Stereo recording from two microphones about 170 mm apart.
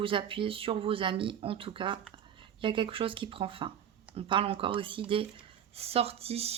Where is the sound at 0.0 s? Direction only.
30° right (ahead or behind).